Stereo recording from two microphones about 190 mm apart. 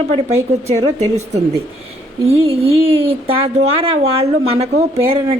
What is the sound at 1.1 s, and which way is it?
Speech, 35° right (ahead or behind).